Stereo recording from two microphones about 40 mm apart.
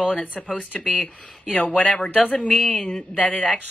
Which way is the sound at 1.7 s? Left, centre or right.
Left.